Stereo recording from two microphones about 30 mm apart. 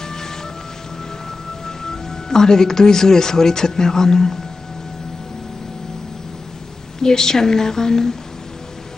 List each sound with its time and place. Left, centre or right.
0.0 s music: centre
1.9 s speech: centre
7.0 s speech: centre